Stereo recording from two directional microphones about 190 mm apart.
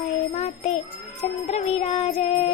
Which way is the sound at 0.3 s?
35° left (ahead or behind).